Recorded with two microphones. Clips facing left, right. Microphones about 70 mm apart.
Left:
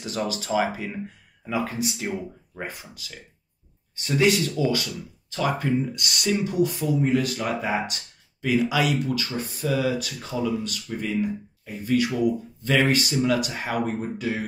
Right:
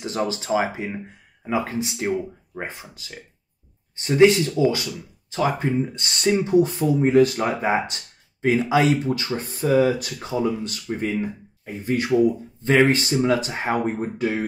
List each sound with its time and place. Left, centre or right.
0.0 s speech: right